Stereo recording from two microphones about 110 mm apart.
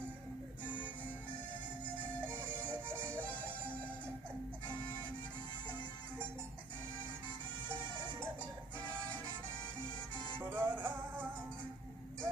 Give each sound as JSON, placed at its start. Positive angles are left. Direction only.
{"t": 10.5, "sound": "music", "side_deg": -20}